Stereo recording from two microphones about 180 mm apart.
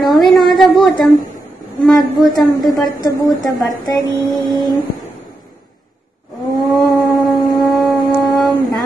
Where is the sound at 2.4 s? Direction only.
20° left (ahead or behind).